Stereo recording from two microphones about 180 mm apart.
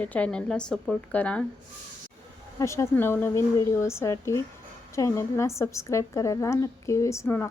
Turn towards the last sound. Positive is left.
turn(degrees=15)  # may be behind; listen again after turning